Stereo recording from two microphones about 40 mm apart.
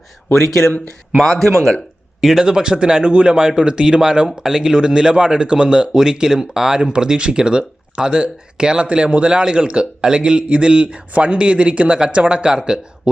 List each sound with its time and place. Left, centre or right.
1.2 s speech: centre
2.2 s speech: centre
2.5 s speech: centre